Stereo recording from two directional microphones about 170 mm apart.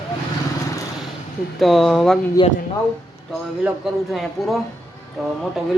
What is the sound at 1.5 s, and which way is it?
Speech, centre (ahead or behind).